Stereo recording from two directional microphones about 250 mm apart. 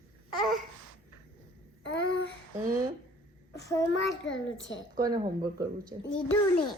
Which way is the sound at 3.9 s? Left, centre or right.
Left.